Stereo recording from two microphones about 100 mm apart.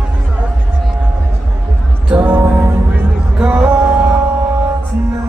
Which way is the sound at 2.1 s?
15° right (ahead or behind).